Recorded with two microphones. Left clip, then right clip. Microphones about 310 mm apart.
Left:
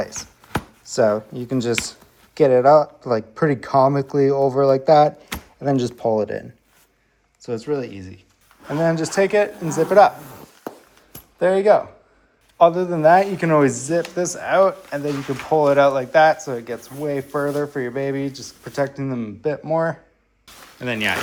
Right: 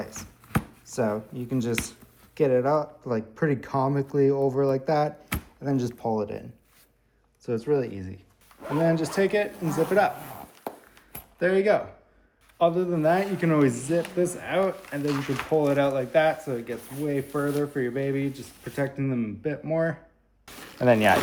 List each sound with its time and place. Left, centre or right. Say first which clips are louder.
0.0 s chopping: left 10 dB; centre
0.9 s speech: left 11 dB; centre
7.4 s speech: left 1 dB; centre
8.9 s speech: left 7 dB; left
11.1 s a sound: left 6 dB; centre
12.5 s speech: left 8 dB; centre
20.7 s speech: right 3 dB; centre